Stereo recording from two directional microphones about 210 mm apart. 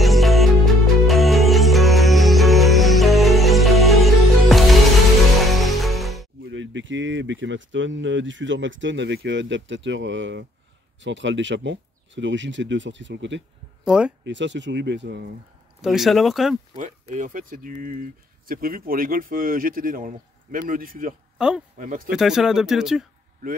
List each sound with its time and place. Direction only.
0.0 s music: centre (ahead or behind)
6.4 s speech: 60° right (ahead or behind)
13.8 s speech: 5° right (ahead or behind)
14.2 s speech: 60° right (ahead or behind)
15.8 s speech: centre (ahead or behind)
16.7 s speech: 35° right (ahead or behind)
21.4 s speech: 5° right (ahead or behind)
21.7 s speech: 40° right (ahead or behind)
22.1 s speech: centre (ahead or behind)